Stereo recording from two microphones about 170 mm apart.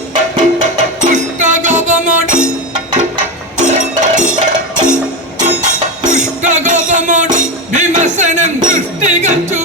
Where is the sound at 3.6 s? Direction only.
50° right (ahead or behind).